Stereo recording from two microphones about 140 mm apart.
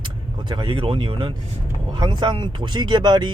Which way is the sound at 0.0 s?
35° right (ahead or behind).